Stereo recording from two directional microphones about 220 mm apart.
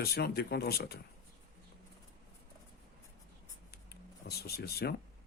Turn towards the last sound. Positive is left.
turn(degrees=45)  # may be behind; listen again after turning